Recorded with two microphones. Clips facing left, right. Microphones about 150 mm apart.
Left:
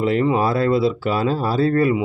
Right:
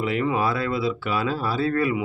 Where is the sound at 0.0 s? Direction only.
35° left (ahead or behind).